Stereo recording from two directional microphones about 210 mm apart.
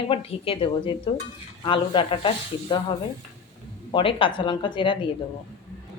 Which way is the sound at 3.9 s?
25° left (ahead or behind).